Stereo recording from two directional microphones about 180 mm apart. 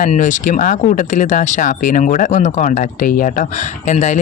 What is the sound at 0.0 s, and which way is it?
Speech, 45° left (ahead or behind).